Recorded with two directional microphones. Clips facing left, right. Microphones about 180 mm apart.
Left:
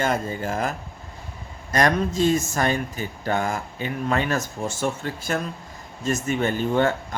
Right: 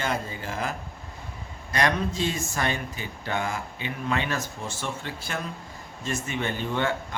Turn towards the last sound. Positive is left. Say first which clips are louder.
# left 6 dB
turn(degrees=45)  # may be behind; listen again after turning